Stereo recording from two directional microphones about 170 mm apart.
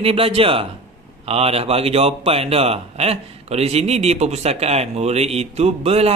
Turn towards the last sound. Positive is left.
turn(degrees=-35)  # may be behind; listen again after turning